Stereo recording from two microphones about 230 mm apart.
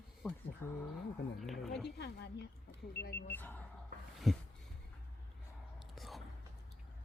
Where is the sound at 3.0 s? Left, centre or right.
Left.